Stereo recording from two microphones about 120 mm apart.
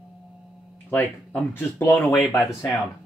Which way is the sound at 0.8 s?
15° left (ahead or behind).